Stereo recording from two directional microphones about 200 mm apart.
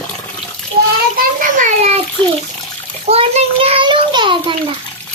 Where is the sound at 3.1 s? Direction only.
30° right (ahead or behind).